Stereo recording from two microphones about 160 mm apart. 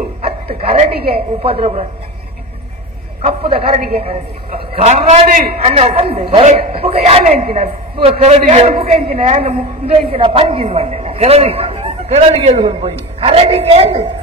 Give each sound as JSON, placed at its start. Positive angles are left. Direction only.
{"t": 0.6, "sound": "a woman's voice", "side_deg": -35}
{"t": 0.9, "sound": "a woman's voice", "side_deg": -80}
{"t": 1.4, "sound": "a woman's voice", "side_deg": -35}
{"t": 3.2, "sound": "a woman's voice", "side_deg": -35}
{"t": 8.0, "sound": "a man's voice", "side_deg": -40}